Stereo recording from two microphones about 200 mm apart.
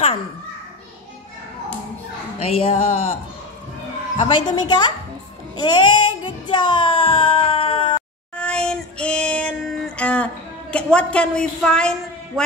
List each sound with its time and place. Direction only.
2.3 s speech: 30° left (ahead or behind)
4.2 s speech: 35° left (ahead or behind)
4.5 s a woman's voice: 20° left (ahead or behind)
5.6 s child singing: 20° left (ahead or behind)
8.4 s child singing: 5° left (ahead or behind)